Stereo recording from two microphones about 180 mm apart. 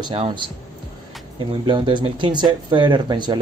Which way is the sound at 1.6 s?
25° right (ahead or behind).